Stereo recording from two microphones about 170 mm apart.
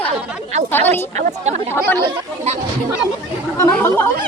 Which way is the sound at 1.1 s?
45° right (ahead or behind).